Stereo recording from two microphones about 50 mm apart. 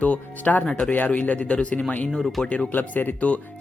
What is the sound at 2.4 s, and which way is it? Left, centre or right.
Speech, centre.